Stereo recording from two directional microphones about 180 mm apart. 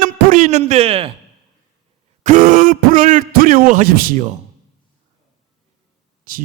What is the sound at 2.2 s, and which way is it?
A man's voice, 45° right (ahead or behind).